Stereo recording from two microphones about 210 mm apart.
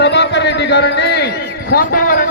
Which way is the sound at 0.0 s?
55° left (ahead or behind).